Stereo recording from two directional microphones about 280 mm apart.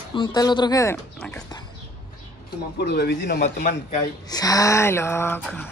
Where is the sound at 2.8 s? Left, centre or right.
Left.